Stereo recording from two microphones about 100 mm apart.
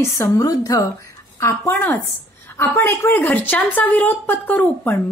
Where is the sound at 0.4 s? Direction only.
40° left (ahead or behind).